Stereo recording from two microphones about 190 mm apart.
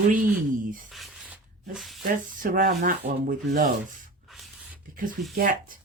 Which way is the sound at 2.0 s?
45° right (ahead or behind).